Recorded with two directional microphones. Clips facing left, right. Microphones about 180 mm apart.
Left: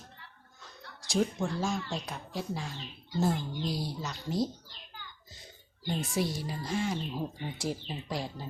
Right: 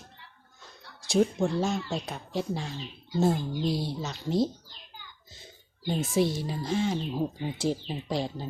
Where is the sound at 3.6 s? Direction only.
25° right (ahead or behind).